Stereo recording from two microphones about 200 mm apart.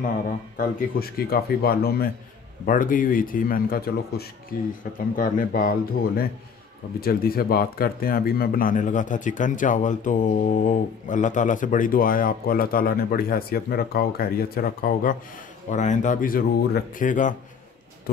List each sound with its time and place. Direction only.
0.6 s speech: 50° left (ahead or behind)